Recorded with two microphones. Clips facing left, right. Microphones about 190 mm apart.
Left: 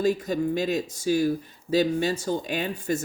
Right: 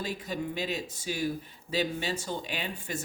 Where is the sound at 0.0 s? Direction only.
45° left (ahead or behind).